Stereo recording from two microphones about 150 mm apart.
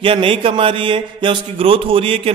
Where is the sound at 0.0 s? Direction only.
35° right (ahead or behind).